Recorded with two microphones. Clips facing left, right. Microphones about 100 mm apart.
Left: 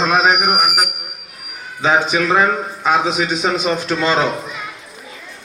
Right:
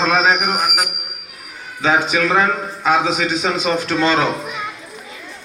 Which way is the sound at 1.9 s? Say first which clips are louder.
Left 1 dB; 30° left (ahead or behind).